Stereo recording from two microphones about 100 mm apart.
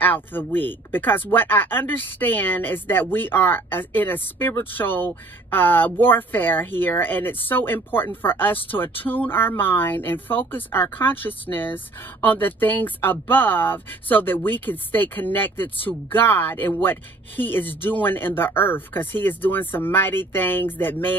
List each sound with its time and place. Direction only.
0.0 s speech: 20° left (ahead or behind)